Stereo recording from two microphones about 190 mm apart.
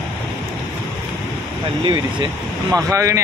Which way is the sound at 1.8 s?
25° right (ahead or behind).